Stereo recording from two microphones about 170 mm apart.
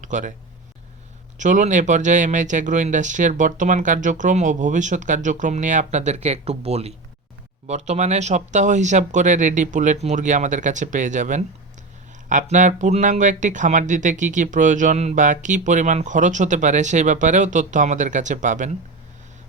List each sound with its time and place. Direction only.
0.0 s speech: 45° right (ahead or behind)
1.4 s speech: 45° right (ahead or behind)